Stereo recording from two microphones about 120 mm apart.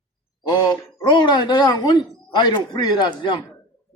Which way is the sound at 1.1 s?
40° left (ahead or behind).